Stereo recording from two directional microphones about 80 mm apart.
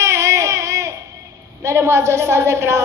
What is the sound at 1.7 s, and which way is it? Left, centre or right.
A woman's voice, right.